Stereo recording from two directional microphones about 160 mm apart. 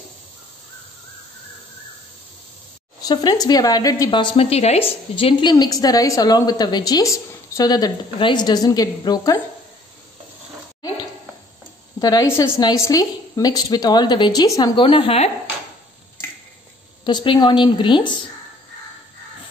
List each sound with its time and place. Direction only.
3.0 s speech: 25° left (ahead or behind)
12.0 s speech: 25° left (ahead or behind); by 15.3 s 40° left (ahead or behind)
17.0 s speech: 30° left (ahead or behind)